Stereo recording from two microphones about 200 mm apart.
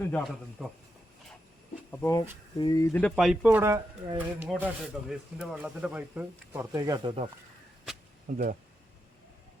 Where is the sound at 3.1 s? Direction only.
Centre (ahead or behind).